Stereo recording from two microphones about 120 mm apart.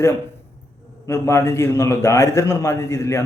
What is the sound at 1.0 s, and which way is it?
A man's voice, 25° left (ahead or behind).